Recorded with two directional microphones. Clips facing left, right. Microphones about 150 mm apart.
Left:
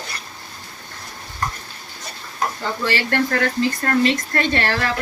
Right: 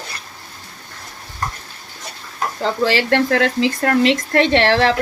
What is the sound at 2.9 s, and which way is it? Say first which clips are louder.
Speech: right 3 dB; 90° right.